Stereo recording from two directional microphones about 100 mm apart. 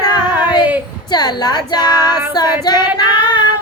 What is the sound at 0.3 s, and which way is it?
Child singing, 15° right (ahead or behind).